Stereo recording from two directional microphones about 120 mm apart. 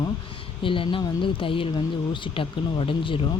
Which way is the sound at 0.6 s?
45° left (ahead or behind).